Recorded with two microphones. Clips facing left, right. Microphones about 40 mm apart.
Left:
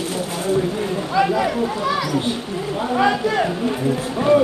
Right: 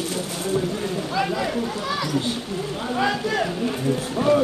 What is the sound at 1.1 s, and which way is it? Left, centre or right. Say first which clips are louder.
Run: left 7 dB; centre.